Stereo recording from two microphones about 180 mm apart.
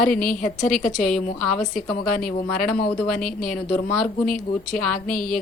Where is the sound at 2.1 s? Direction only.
50° left (ahead or behind).